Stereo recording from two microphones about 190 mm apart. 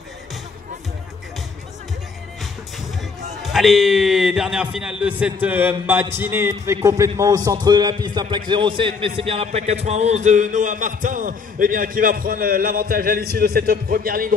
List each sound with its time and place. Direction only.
3.4 s a man's voice: centre (ahead or behind); by 14.3 s 50° right (ahead or behind)